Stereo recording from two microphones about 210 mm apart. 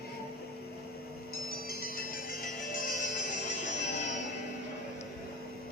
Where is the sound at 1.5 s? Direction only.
45° left (ahead or behind).